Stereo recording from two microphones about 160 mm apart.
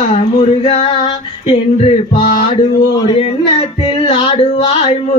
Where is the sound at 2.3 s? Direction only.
30° left (ahead or behind).